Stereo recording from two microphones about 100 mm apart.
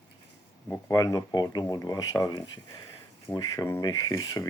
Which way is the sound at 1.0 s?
40° left (ahead or behind).